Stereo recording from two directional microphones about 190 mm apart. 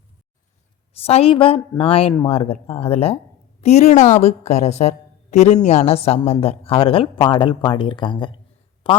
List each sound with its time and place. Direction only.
0.9 s a woman's voice: 30° left (ahead or behind)